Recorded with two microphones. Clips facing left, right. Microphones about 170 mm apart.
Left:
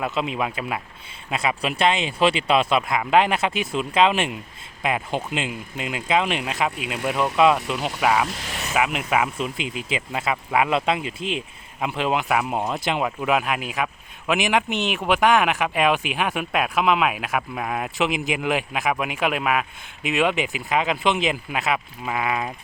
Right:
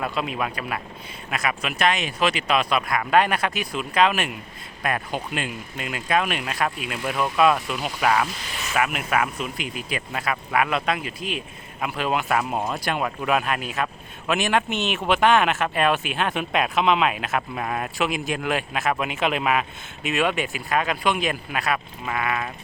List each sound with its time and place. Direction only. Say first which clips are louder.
0.0 s speech: left 2 dB; 20° left (ahead or behind)
8.3 s speech: left 3 dB; 85° left
8.7 s speech: left 1 dB; 20° left (ahead or behind)